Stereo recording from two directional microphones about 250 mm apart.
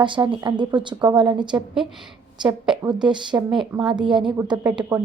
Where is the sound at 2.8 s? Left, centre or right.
Centre.